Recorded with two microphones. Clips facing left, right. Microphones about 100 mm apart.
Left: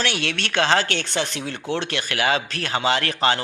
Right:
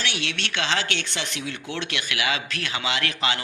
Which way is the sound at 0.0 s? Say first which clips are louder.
Left 5 dB; 50° left (ahead or behind).